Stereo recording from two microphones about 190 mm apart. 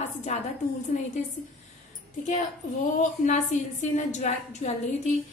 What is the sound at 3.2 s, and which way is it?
A woman's voice, 40° left (ahead or behind).